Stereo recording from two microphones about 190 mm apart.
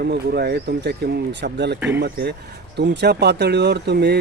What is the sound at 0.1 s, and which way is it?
Speech, 60° right (ahead or behind).